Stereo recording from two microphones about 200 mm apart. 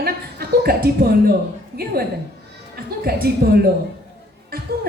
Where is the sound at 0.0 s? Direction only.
50° right (ahead or behind).